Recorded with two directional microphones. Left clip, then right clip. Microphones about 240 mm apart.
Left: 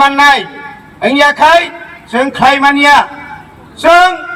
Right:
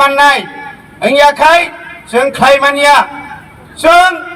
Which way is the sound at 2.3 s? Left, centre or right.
Right.